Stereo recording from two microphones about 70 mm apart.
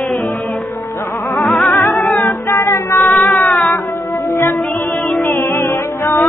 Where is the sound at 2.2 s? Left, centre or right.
Left.